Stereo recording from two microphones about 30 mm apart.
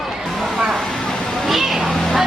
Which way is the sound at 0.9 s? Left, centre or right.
Left.